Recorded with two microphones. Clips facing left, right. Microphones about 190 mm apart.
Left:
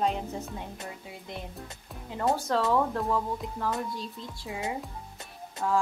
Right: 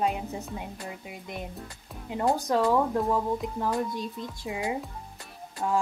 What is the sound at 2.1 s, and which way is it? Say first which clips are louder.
Speech: right 2 dB; 15° right (ahead or behind).